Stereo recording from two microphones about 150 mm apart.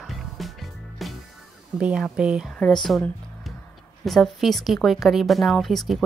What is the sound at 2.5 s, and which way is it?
Speech, 5° left (ahead or behind).